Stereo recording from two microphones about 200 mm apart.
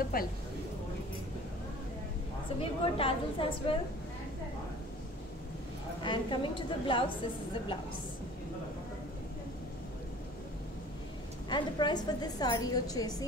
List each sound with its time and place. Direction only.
0.0 s a woman's voice: 45° left (ahead or behind)
2.6 s a woman's voice: 25° left (ahead or behind)
6.0 s a woman's voice: 25° left (ahead or behind)
11.4 s a woman's voice: 20° left (ahead or behind)